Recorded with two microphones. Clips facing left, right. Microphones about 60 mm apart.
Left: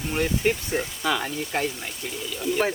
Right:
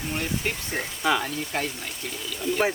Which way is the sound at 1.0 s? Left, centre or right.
Centre.